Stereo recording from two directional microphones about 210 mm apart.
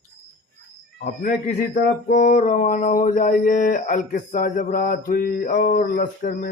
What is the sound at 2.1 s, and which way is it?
Mantra, 35° left (ahead or behind).